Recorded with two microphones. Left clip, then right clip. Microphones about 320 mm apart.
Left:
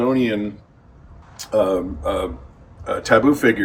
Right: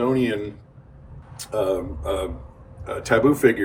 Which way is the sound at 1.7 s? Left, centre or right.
Left.